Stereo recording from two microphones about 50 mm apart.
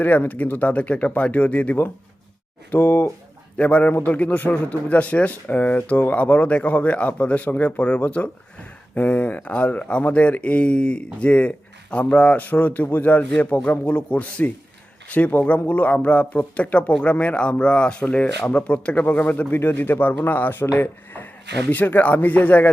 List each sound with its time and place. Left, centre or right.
0.3 s speech: left
2.6 s speech: left
3.6 s speech: left